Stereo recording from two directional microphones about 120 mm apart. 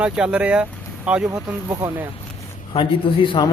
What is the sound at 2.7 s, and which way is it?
Speech, 45° left (ahead or behind).